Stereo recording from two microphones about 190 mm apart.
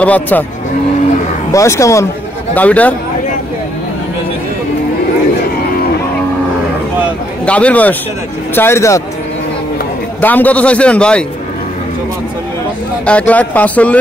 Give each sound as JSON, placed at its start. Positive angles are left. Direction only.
{"t": 0.0, "sound": "a man's voice", "side_deg": 10}
{"t": 1.5, "sound": "a man's voice", "side_deg": 15}
{"t": 7.4, "sound": "a man's voice", "side_deg": 5}
{"t": 10.2, "sound": "a man's voice", "side_deg": 10}
{"t": 13.0, "sound": "a man's voice", "side_deg": 5}